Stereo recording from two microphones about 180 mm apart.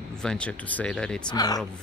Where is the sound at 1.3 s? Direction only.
20° left (ahead or behind).